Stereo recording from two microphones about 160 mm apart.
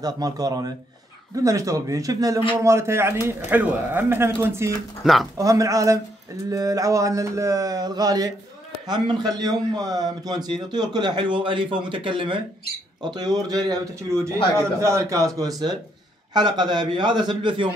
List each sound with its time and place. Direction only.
0.0 s a man's voice: 25° right (ahead or behind)
5.0 s speech: centre (ahead or behind)
5.4 s a man's voice: 20° right (ahead or behind)